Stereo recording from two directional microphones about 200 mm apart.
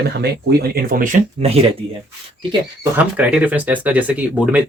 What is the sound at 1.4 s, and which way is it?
Speech, 30° right (ahead or behind).